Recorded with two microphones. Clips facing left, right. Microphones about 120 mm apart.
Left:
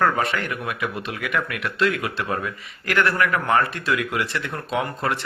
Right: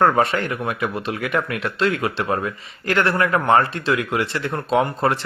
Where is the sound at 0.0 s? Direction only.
30° right (ahead or behind).